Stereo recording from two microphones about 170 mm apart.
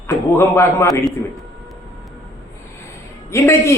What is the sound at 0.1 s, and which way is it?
Speech, 15° left (ahead or behind).